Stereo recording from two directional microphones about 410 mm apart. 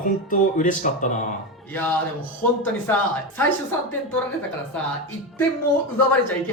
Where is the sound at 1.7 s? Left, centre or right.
Centre.